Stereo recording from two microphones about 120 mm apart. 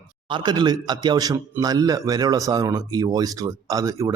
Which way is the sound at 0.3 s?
40° right (ahead or behind).